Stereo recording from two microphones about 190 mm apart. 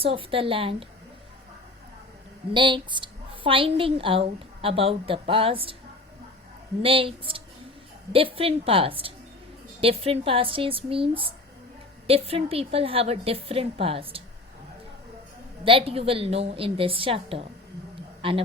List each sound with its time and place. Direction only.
0.0 s a woman's voice: 30° right (ahead or behind)
2.5 s a woman's voice: 25° right (ahead or behind)
6.8 s a woman's voice: 30° right (ahead or behind)
15.6 s a woman's voice: 30° right (ahead or behind)